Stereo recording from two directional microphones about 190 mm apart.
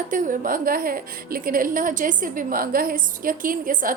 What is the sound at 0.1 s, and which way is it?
A woman's voice, 45° right (ahead or behind).